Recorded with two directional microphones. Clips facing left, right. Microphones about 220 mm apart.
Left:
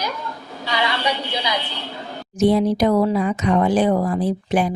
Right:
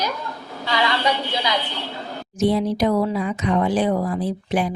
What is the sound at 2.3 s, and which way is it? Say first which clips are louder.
Speech: left 3 dB; 50° left (ahead or behind).